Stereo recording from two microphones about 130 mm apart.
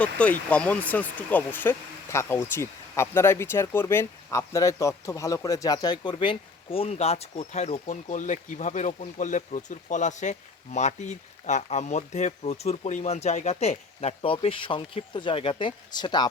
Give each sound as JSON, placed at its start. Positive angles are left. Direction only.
{"t": 0.0, "sound": "speech", "side_deg": 10}